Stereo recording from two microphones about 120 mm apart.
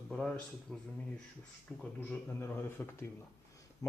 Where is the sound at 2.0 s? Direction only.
20° left (ahead or behind).